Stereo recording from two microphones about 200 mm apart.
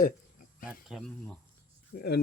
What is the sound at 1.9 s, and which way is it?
Speech, 55° left (ahead or behind).